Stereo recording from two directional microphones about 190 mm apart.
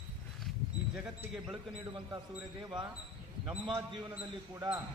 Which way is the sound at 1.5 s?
25° right (ahead or behind).